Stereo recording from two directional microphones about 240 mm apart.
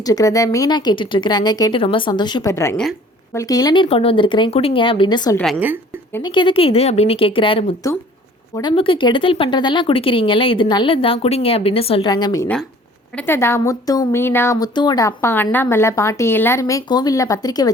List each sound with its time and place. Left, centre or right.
0.0 s a woman's voice: centre
5.4 s a woman's voice: centre
6.1 s a woman's voice: centre